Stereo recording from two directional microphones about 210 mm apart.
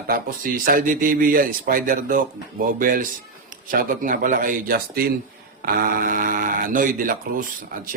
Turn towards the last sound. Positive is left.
turn(degrees=-40)  # may be behind; listen again after turning